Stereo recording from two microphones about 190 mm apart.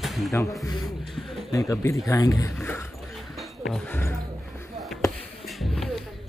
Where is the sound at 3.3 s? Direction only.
Centre (ahead or behind).